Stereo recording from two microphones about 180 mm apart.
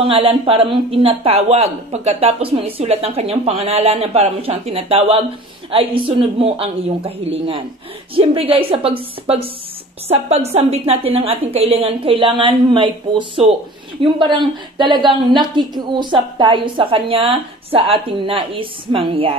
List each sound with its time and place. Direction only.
0.0 s a woman's voice: 30° right (ahead or behind)